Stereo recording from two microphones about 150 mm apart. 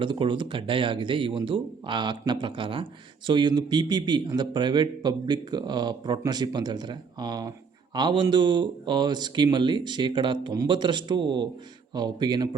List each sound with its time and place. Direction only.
0.0 s a man's voice: 35° right (ahead or behind)